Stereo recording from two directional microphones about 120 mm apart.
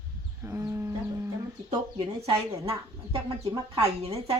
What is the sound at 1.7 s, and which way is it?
Speech, 45° right (ahead or behind).